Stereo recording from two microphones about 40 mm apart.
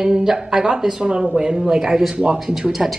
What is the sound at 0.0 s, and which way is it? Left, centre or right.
Speech, centre.